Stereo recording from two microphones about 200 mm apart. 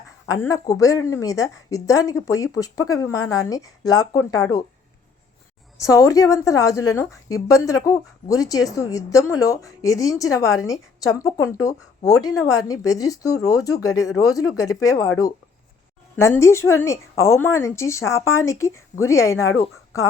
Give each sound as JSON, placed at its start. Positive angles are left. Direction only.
{"t": 0.3, "sound": "a woman's voice", "side_deg": 15}
{"t": 5.8, "sound": "a woman's voice", "side_deg": 15}
{"t": 16.1, "sound": "a woman's voice", "side_deg": 15}